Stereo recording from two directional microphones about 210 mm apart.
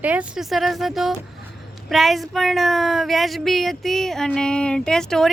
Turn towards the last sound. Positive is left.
turn(degrees=5)  # may be behind; listen again after turning